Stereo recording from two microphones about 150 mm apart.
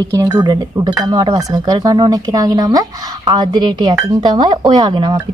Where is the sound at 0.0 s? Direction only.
25° right (ahead or behind).